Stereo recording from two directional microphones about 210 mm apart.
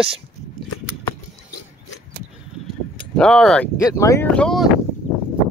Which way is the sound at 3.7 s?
15° left (ahead or behind).